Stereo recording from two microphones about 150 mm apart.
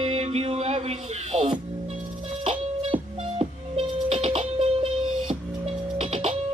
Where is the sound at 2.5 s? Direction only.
35° right (ahead or behind).